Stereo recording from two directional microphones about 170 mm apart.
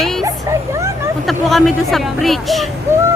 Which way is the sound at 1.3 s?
Centre (ahead or behind).